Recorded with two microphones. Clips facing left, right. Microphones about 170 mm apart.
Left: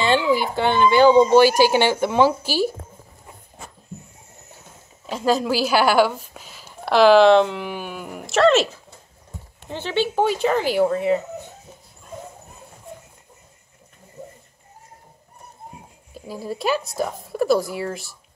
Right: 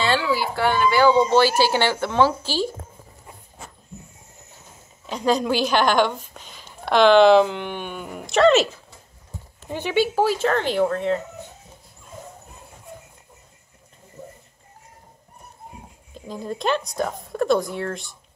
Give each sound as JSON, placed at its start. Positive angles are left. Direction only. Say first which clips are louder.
{"t": 0.0, "sound": "speech", "louder": "left 3 dB", "side_deg": 20}
{"t": 5.1, "sound": "a woman's voice", "louder": "left 1 dB", "side_deg": 5}
{"t": 9.7, "sound": "a woman's voice", "louder": "right 2 dB", "side_deg": -10}
{"t": 16.1, "sound": "a woman's voice", "louder": "even", "side_deg": 5}